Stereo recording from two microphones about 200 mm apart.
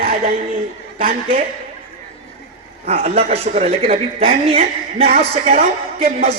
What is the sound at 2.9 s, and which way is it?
A woman's voice, 30° right (ahead or behind).